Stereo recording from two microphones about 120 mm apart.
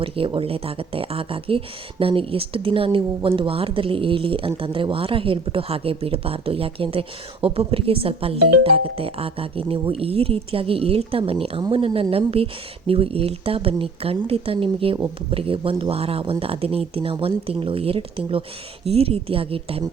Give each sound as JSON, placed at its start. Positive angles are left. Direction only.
{"t": 0.0, "sound": "speech", "side_deg": -50}